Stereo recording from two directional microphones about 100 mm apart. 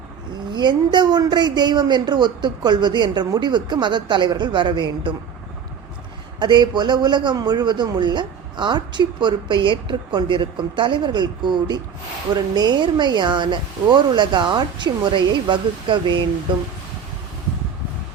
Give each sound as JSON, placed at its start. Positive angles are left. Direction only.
{"t": 0.5, "sound": "a man's voice", "side_deg": -50}
{"t": 6.4, "sound": "a man's voice", "side_deg": -50}